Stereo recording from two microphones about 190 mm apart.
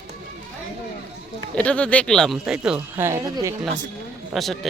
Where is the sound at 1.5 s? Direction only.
5° left (ahead or behind).